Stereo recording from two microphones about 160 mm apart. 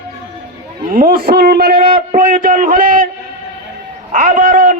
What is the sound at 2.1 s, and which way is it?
Speech, 55° right (ahead or behind).